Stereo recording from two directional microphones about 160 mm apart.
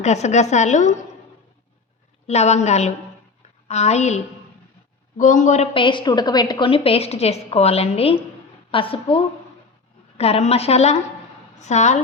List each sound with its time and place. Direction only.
0.0 s a woman's voice: 45° left (ahead or behind)
2.2 s a woman's voice: 45° left (ahead or behind)
5.7 s a woman's voice: 30° left (ahead or behind)